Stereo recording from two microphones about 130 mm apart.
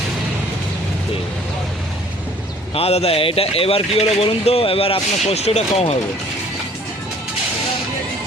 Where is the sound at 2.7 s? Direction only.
50° left (ahead or behind).